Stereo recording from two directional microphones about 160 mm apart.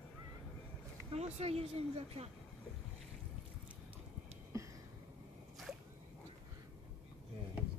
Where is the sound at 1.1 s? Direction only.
40° right (ahead or behind).